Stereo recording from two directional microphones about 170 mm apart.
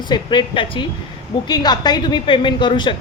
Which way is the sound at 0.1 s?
25° left (ahead or behind).